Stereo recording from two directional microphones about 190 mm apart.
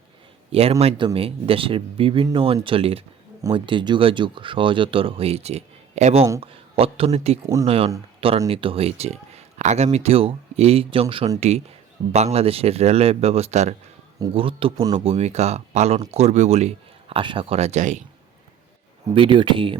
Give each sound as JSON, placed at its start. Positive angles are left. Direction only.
{"t": 0.5, "sound": "speech", "side_deg": -30}
{"t": 19.1, "sound": "speech", "side_deg": -25}